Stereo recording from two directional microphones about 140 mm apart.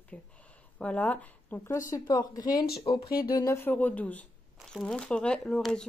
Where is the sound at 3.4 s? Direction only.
15° left (ahead or behind).